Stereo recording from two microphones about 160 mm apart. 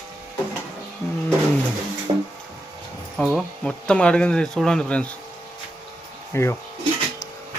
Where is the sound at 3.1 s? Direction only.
Centre (ahead or behind).